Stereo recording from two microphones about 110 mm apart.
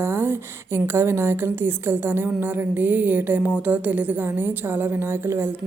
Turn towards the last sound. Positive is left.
turn(degrees=-20)  # may be behind; listen again after turning